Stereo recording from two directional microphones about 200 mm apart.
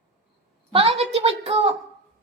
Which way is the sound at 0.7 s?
30° right (ahead or behind).